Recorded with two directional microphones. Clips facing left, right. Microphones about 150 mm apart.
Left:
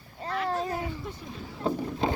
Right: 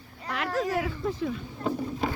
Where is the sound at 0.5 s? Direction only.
90° right.